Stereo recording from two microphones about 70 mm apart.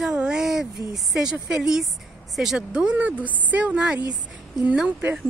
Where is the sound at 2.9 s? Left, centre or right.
Right.